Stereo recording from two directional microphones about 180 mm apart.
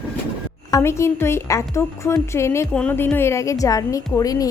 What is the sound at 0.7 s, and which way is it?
A woman's voice, 15° left (ahead or behind).